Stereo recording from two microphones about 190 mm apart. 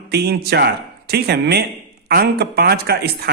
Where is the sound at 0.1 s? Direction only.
60° right (ahead or behind).